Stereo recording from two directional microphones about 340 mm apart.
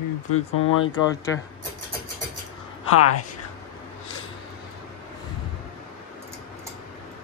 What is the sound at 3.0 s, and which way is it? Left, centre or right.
Speech, left.